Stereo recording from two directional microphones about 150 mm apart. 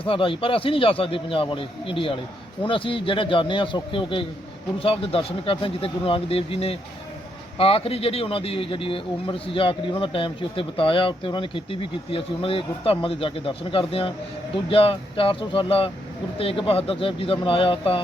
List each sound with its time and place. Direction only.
0.0 s speech: 35° left (ahead or behind)